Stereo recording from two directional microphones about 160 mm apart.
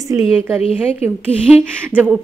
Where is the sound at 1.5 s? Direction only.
10° right (ahead or behind).